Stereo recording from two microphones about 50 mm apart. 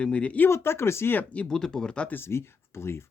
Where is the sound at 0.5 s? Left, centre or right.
Left.